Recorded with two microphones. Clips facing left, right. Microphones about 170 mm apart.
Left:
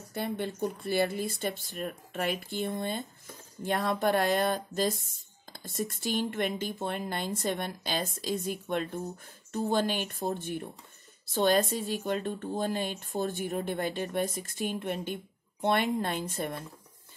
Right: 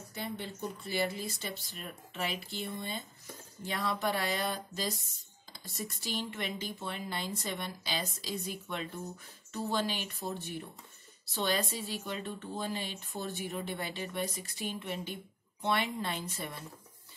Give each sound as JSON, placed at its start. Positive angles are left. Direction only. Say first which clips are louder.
{"t": 0.1, "sound": "speech", "louder": "left 7 dB", "side_deg": 55}